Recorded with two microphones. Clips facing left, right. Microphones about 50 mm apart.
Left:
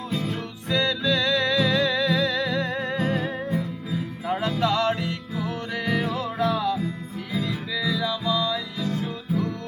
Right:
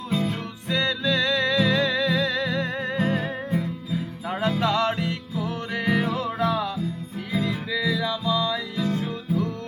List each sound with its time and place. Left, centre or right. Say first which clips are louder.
0.1 s music: right 4 dB; right
0.7 s music: left 1 dB; centre